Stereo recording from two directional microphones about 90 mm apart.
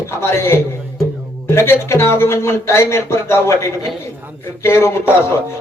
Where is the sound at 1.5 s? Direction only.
30° left (ahead or behind).